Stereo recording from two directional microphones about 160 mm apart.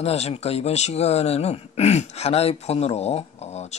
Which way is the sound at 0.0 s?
40° left (ahead or behind).